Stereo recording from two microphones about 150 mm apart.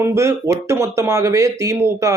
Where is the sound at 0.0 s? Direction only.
20° right (ahead or behind).